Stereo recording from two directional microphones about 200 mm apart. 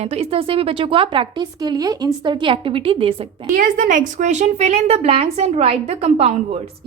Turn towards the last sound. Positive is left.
turn(degrees=-30)  # may be behind; listen again after turning